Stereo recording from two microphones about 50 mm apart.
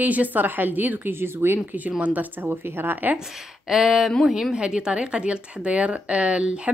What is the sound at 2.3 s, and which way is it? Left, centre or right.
Speech, right.